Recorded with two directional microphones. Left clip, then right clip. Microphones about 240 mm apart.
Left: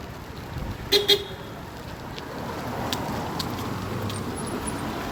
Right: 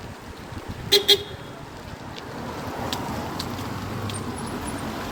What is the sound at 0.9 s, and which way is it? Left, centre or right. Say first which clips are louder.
Vehicle: right 2 dB; right.